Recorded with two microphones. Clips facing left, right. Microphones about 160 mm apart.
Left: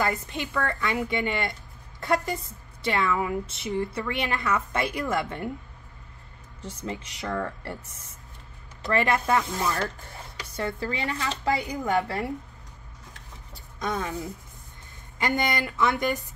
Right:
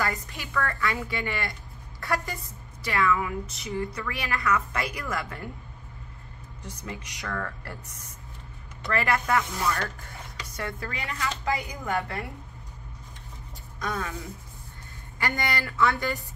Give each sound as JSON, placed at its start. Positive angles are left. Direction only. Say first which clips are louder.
{"t": 0.0, "sound": "a woman's voice", "louder": "left 3 dB", "side_deg": 25}
{"t": 6.6, "sound": "a woman's voice", "louder": "left 4 dB", "side_deg": 25}
{"t": 13.7, "sound": "a woman's voice", "louder": "left 3 dB", "side_deg": 25}